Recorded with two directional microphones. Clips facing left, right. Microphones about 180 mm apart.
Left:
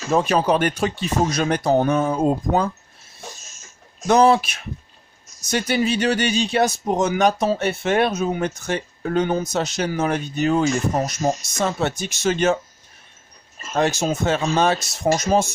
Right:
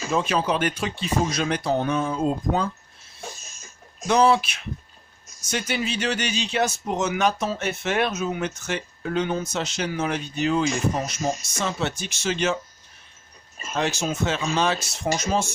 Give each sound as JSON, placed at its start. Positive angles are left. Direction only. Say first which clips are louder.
{"t": 0.1, "sound": "speech", "louder": "left 5 dB", "side_deg": 45}
{"t": 4.1, "sound": "speech", "louder": "left 4 dB", "side_deg": 45}
{"t": 13.7, "sound": "speech", "louder": "left 5 dB", "side_deg": 40}